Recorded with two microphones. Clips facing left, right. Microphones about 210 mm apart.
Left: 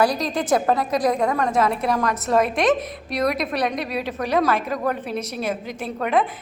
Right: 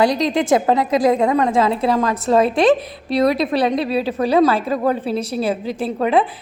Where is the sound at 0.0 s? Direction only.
25° right (ahead or behind).